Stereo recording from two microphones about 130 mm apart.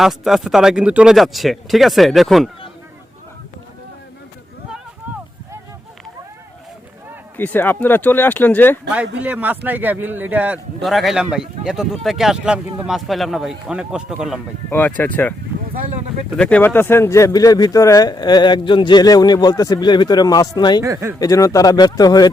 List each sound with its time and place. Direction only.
0.0 s speech: centre (ahead or behind)
7.3 s speech: 15° left (ahead or behind)
8.9 s speech: 10° right (ahead or behind)
10.8 s speech: centre (ahead or behind)
14.7 s speech: 10° left (ahead or behind)
16.4 s speech: 10° left (ahead or behind); by 20.8 s 35° left (ahead or behind)
20.8 s speech: 25° right (ahead or behind)
21.2 s speech: 25° left (ahead or behind)